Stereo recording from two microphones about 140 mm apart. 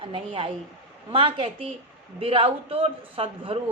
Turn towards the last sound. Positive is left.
turn(degrees=-40)  # may be behind; listen again after turning